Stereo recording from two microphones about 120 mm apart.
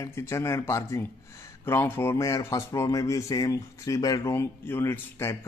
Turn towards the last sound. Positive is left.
turn(degrees=20)  # may be behind; listen again after turning